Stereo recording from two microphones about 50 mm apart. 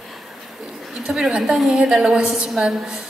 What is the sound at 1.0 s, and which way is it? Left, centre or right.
A woman's voice, centre.